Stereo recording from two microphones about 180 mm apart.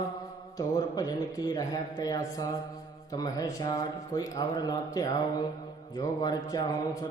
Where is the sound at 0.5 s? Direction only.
20° left (ahead or behind).